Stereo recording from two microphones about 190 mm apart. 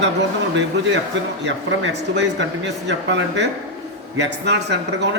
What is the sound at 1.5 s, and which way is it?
Speech, 70° right (ahead or behind).